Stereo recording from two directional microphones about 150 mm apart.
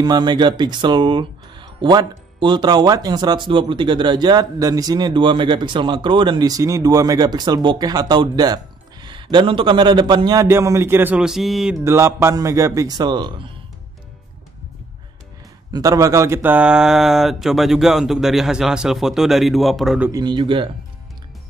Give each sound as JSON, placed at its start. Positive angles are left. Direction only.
{"t": 0.0, "sound": "speech", "side_deg": -30}
{"t": 11.8, "sound": "speech", "side_deg": -20}
{"t": 15.7, "sound": "speech", "side_deg": -20}
{"t": 20.1, "sound": "speech", "side_deg": -25}